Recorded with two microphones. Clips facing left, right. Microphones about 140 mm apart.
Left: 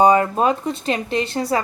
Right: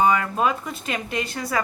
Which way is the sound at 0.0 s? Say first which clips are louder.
Left 5 dB; 35° left (ahead or behind).